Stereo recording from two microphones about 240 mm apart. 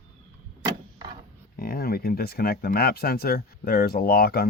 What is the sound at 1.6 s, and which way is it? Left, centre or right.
Speech, left.